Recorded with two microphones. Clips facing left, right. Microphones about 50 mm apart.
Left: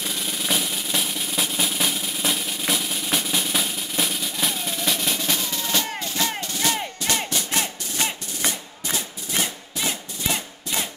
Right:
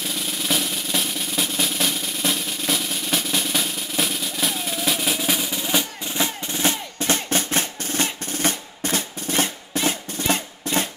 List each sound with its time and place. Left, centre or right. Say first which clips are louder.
0.0 s drum roll: right 1 dB; centre; by 7.2 s right
7.2 s percussion: right 3 dB; right